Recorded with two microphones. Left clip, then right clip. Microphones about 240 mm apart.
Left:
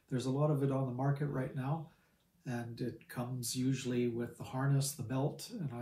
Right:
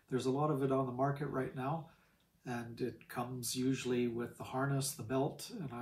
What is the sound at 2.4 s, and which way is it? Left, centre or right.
Speech, centre.